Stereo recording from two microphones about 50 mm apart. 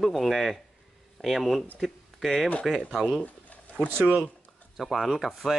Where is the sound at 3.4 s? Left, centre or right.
Left.